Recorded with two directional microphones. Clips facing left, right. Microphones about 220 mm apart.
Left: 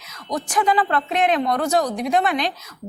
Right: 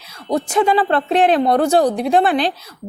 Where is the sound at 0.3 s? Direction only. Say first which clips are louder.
Right 5 dB; 25° right (ahead or behind).